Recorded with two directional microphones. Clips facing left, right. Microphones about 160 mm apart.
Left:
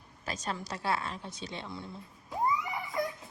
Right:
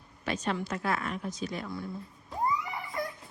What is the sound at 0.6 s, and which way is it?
A woman's voice, 30° left (ahead or behind).